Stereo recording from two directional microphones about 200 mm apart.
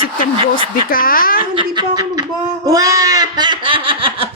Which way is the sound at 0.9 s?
45° left (ahead or behind).